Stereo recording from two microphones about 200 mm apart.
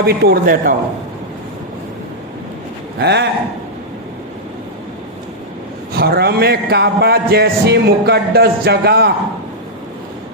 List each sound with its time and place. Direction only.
0.0 s a man's voice: 50° right (ahead or behind)
3.0 s a man's voice: 55° right (ahead or behind)
5.9 s a man's voice: 50° right (ahead or behind)